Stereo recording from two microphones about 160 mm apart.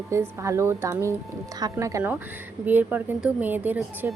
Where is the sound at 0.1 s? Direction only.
20° right (ahead or behind).